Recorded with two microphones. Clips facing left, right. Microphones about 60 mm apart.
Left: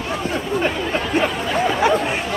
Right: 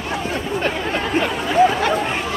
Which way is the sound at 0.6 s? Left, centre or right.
Centre.